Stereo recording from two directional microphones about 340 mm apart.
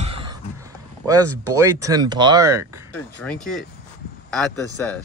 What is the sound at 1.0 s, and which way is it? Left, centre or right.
A man's voice, centre.